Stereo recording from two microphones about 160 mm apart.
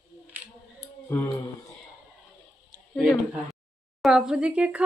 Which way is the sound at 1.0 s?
15° left (ahead or behind).